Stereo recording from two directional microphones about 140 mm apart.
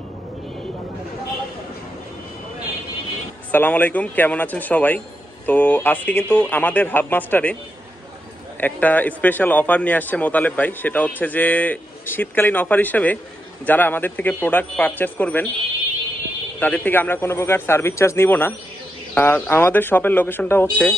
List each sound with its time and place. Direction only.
3.5 s a man's voice: 15° left (ahead or behind)
8.5 s a man's voice: 10° left (ahead or behind)
16.5 s a man's voice: 10° left (ahead or behind)